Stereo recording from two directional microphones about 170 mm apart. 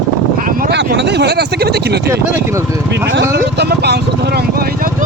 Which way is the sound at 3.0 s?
85° right.